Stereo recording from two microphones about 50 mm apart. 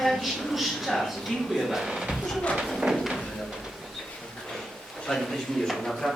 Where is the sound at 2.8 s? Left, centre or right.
Centre.